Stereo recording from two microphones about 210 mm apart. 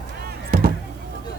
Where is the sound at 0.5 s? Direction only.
45° right (ahead or behind).